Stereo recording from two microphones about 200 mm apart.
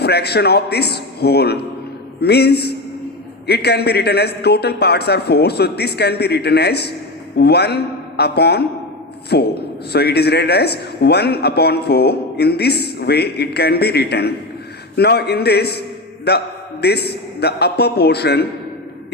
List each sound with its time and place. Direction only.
0.0 s a man's voice: 55° left (ahead or behind)